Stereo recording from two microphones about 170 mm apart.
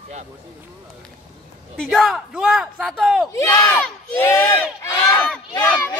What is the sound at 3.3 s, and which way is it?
Speech, 20° left (ahead or behind).